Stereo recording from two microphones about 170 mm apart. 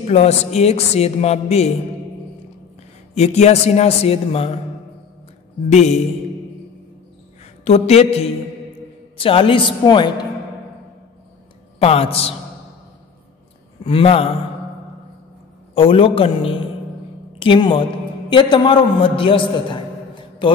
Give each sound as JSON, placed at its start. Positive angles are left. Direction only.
{"t": 0.1, "sound": "speech", "side_deg": 40}
{"t": 3.2, "sound": "speech", "side_deg": 40}
{"t": 5.7, "sound": "speech", "side_deg": 40}
{"t": 7.6, "sound": "speech", "side_deg": 40}
{"t": 11.8, "sound": "speech", "side_deg": 35}
{"t": 13.8, "sound": "speech", "side_deg": 35}
{"t": 15.7, "sound": "a woman's voice", "side_deg": 30}